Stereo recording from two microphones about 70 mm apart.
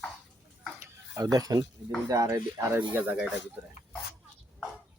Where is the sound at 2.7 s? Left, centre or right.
Right.